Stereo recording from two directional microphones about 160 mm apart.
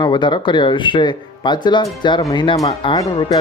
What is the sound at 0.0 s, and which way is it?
Speech, 30° left (ahead or behind).